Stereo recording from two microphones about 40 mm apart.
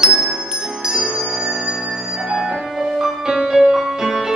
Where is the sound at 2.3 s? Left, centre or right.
Centre.